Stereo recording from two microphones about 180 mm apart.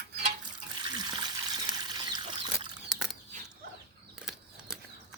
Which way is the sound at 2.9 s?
Centre (ahead or behind).